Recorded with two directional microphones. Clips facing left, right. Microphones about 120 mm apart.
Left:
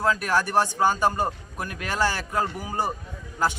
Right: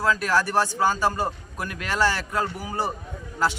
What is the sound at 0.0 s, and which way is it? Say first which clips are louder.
Speech: right 1 dB; 20° left (ahead or behind).